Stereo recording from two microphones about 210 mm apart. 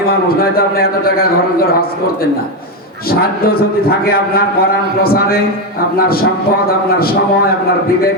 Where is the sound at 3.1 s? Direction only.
45° left (ahead or behind).